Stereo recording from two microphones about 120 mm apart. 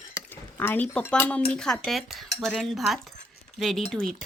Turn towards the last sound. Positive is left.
turn(degrees=0)  # may be behind; listen again after turning